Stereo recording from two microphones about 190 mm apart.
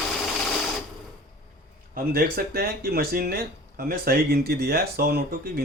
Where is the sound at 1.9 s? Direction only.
50° right (ahead or behind).